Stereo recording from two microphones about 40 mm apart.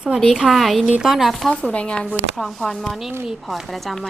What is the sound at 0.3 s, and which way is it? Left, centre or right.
Speech, centre.